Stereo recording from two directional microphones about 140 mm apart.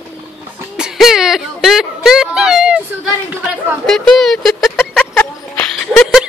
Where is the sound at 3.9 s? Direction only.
5° left (ahead or behind).